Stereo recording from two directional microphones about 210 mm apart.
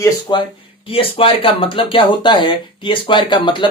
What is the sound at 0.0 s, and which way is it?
Speech, 20° left (ahead or behind).